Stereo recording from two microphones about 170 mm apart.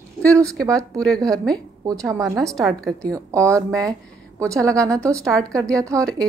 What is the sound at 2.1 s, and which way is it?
Speech, 20° right (ahead or behind).